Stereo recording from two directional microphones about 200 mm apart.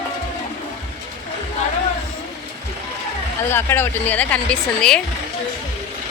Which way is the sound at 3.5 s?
10° left (ahead or behind).